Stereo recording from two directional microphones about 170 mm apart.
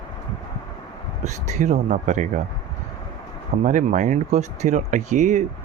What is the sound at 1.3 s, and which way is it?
Speech, 45° right (ahead or behind).